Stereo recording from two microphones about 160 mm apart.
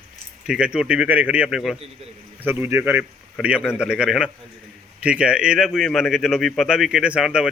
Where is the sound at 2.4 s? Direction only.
15° right (ahead or behind).